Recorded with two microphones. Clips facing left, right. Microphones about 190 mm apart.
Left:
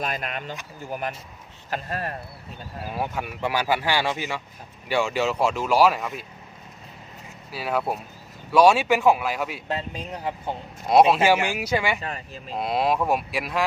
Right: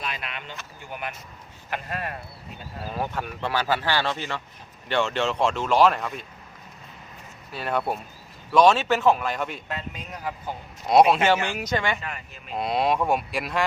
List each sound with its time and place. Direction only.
0.0 s speech: 45° left (ahead or behind)
2.8 s speech: 10° left (ahead or behind)
7.5 s speech: 5° left (ahead or behind)
9.6 s speech: 30° left (ahead or behind)
11.1 s speech: 10° left (ahead or behind)
12.0 s speech: 35° left (ahead or behind)
12.5 s speech: centre (ahead or behind)